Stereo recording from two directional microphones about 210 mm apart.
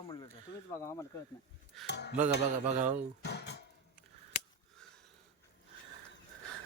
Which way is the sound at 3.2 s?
50° left (ahead or behind).